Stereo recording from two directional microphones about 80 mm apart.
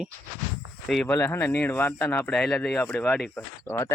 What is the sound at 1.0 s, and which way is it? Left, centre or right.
Speech, left.